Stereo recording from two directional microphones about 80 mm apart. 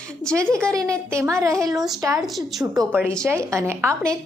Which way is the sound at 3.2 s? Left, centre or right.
Right.